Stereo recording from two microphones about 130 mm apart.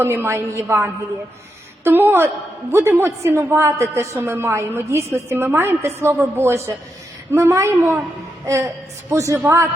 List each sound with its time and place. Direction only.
0.0 s a woman's voice: 20° right (ahead or behind)